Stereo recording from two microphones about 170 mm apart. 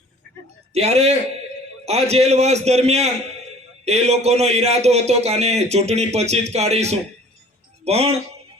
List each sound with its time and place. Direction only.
0.7 s a man's voice: 40° right (ahead or behind)